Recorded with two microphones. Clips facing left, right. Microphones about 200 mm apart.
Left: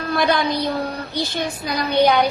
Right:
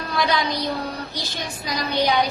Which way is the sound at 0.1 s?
55° left (ahead or behind).